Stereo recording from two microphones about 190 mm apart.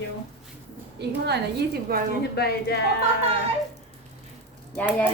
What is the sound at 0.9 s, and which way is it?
A woman's voice, 60° right (ahead or behind).